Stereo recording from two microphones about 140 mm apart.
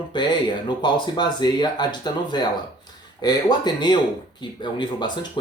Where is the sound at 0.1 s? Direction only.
35° left (ahead or behind).